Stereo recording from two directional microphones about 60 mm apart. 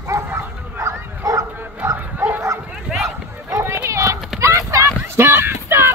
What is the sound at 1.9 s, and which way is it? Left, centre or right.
Bow-wow, right.